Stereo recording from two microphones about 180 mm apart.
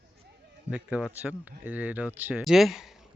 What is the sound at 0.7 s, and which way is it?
Speech, 5° right (ahead or behind).